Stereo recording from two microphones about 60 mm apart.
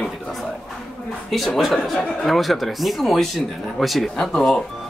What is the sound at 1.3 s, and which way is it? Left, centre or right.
Speech, centre.